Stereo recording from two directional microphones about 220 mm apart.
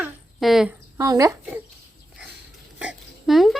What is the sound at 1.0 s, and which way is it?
Speech, 15° right (ahead or behind).